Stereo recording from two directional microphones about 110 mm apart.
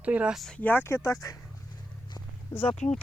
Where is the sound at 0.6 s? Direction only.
15° left (ahead or behind).